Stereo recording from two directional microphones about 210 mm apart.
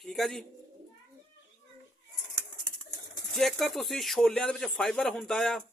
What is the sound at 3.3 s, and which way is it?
Speech, centre (ahead or behind).